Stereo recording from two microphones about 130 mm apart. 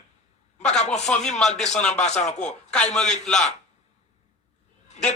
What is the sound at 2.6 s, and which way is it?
Speech, 5° left (ahead or behind).